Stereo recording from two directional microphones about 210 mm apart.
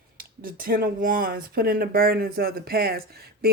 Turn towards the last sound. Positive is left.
turn(degrees=-45)  # may be behind; listen again after turning